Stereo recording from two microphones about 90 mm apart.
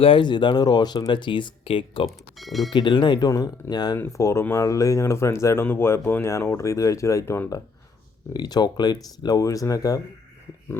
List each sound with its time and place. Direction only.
0.0 s speech: 65° left (ahead or behind)
2.0 s speech: centre (ahead or behind)
2.7 s speech: 60° left (ahead or behind)
3.2 s speech: 45° left (ahead or behind)
3.9 s speech: 30° left (ahead or behind)
8.3 s speech: 50° left (ahead or behind)